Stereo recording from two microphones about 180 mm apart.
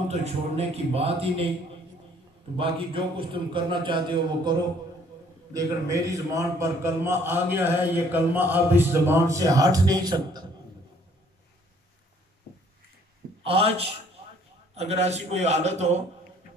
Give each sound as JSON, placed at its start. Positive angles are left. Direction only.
{"t": 0.1, "sound": "a man's voice", "side_deg": -35}
{"t": 2.5, "sound": "a man's voice", "side_deg": -30}
{"t": 13.4, "sound": "a man's voice", "side_deg": -35}